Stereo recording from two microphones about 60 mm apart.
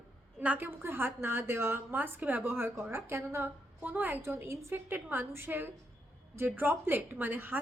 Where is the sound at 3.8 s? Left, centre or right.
Right.